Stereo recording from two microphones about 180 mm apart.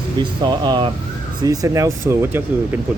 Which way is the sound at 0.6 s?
25° right (ahead or behind).